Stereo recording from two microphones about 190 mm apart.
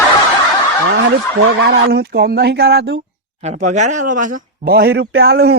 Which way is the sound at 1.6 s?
60° right (ahead or behind).